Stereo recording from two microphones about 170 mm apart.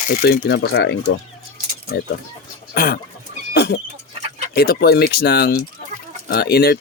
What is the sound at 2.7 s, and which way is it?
Speech, 60° left (ahead or behind).